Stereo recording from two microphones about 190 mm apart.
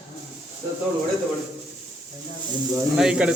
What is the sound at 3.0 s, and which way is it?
Speech, 5° right (ahead or behind).